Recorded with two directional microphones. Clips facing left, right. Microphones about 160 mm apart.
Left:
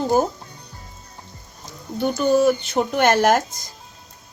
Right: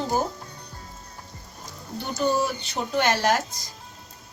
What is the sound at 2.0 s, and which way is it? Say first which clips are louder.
Speech: left 7 dB; 55° left (ahead or behind).